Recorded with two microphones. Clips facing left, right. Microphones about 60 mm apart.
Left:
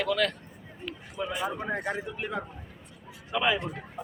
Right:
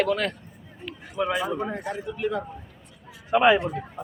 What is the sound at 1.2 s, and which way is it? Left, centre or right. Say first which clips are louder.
Speech: right 8 dB; right.